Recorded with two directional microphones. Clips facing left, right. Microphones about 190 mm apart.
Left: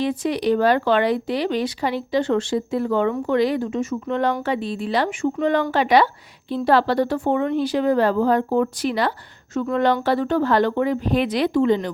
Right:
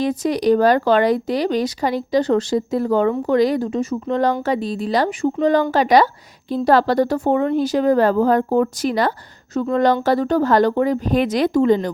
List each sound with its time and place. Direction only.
0.0 s speech: 40° right (ahead or behind)